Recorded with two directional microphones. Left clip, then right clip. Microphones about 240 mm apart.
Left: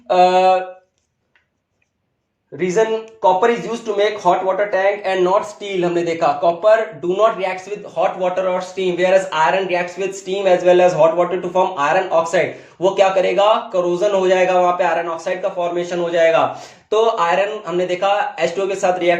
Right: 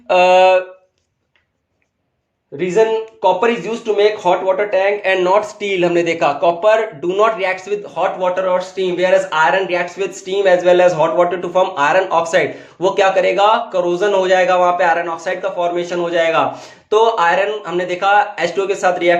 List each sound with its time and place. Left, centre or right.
0.1 s speech: right
2.6 s speech: right